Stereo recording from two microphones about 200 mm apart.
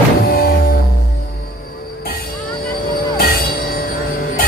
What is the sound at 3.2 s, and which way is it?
Music, 50° left (ahead or behind).